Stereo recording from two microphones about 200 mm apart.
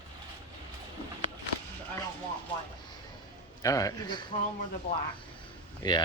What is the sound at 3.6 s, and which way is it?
Speech, 15° left (ahead or behind).